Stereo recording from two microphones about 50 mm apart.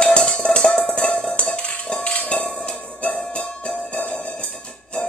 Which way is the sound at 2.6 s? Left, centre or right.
Left.